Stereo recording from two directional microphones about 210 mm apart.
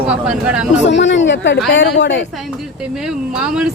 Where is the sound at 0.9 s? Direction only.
60° left (ahead or behind).